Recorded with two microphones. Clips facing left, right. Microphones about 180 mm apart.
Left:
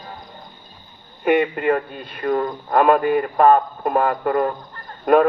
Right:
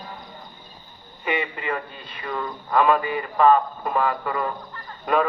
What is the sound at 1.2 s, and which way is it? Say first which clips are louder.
A man's voice: left 9 dB; 55° left (ahead or behind).